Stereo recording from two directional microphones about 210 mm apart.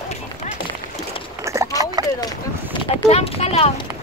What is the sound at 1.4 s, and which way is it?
Clip-clop, 15° right (ahead or behind).